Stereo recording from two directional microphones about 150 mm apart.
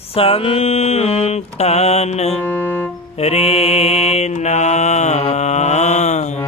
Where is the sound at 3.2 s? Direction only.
45° left (ahead or behind).